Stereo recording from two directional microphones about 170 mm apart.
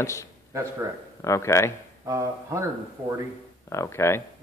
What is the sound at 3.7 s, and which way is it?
Speech, 15° left (ahead or behind).